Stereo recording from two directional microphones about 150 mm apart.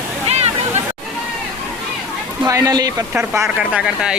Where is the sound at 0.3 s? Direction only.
45° right (ahead or behind).